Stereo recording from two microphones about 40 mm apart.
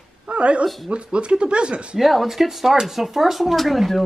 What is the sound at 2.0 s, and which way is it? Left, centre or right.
Speech, centre.